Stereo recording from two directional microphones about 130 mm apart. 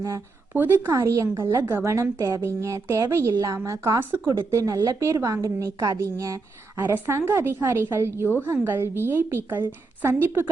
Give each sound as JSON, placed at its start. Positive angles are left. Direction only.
{"t": 0.5, "sound": "a woman's voice", "side_deg": -15}